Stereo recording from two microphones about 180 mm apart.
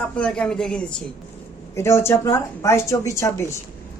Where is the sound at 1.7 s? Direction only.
15° left (ahead or behind).